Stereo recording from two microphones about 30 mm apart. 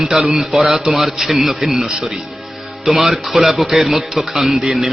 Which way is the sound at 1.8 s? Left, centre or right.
Right.